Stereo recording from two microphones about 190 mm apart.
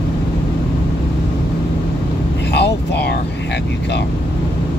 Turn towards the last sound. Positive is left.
turn(degrees=65)  # may be behind; listen again after turning